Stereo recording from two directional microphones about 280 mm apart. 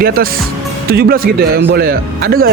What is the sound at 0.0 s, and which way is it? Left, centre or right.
Speech, right.